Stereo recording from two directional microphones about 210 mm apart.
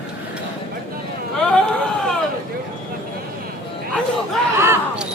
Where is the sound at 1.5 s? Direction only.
5° left (ahead or behind).